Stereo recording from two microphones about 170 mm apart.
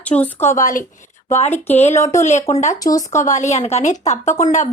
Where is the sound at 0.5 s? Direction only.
50° left (ahead or behind).